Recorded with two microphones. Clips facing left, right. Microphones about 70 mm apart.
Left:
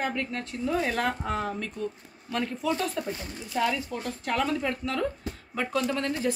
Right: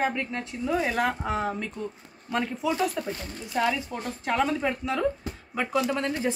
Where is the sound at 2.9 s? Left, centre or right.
Centre.